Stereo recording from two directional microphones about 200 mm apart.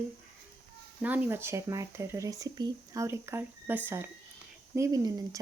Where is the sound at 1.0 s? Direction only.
10° right (ahead or behind).